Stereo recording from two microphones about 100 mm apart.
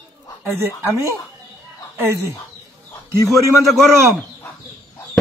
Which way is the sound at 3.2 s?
Centre (ahead or behind).